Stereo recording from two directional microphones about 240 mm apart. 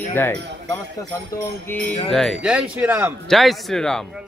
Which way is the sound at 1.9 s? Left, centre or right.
Left.